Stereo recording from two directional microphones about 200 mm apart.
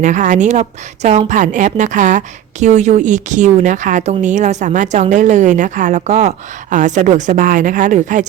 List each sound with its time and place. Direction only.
0.0 s a woman's voice: 40° right (ahead or behind)